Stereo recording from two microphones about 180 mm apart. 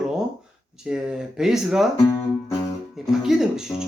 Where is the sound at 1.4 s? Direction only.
Centre (ahead or behind).